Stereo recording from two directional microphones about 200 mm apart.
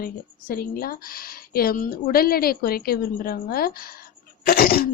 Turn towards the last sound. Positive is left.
turn(degrees=50)  # may be behind; listen again after turning